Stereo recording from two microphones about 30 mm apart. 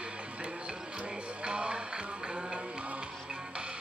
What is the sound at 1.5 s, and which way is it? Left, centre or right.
Music, right.